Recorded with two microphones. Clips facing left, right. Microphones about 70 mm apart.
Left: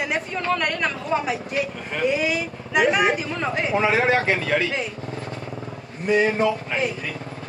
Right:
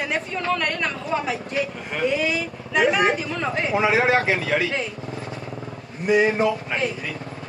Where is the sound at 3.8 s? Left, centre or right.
Centre.